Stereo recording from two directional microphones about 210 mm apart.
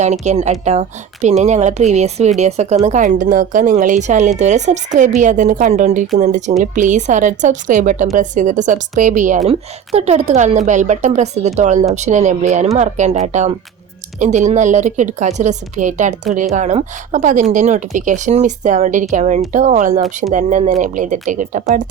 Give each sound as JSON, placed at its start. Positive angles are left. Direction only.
{"t": 0.0, "sound": "a woman's voice", "side_deg": -35}